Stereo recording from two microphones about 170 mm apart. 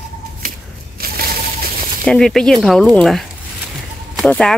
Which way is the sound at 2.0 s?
5° left (ahead or behind).